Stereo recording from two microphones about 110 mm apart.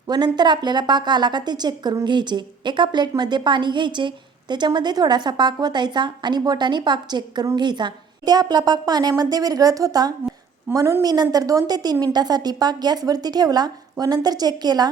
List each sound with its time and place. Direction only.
0.3 s a woman's voice: 40° right (ahead or behind)
10.7 s a woman's voice: 25° right (ahead or behind)